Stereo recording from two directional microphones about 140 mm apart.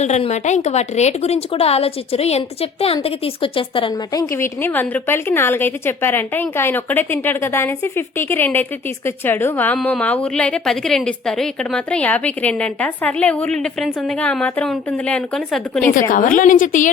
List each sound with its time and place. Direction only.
0.0 s a woman's voice: 55° left (ahead or behind); by 3.9 s 40° left (ahead or behind)
4.1 s a woman's voice: 20° left (ahead or behind); by 15.8 s 5° left (ahead or behind)
16.0 s a woman's voice: 70° left (ahead or behind)